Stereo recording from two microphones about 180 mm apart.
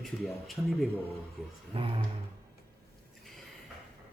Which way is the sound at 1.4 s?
Centre (ahead or behind).